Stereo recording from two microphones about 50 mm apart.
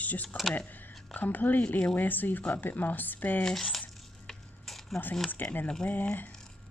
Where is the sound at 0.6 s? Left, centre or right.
Left.